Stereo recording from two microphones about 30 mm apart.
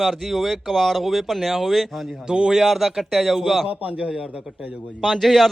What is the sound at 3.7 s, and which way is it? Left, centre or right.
Speech, right.